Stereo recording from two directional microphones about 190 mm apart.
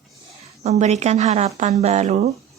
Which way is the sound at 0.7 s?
35° right (ahead or behind).